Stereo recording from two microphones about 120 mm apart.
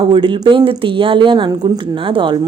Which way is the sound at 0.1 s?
45° right (ahead or behind).